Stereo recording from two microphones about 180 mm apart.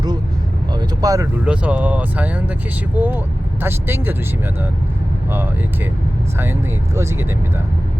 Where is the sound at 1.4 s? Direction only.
5° right (ahead or behind).